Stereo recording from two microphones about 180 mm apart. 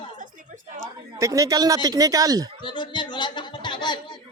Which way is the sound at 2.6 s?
25° left (ahead or behind).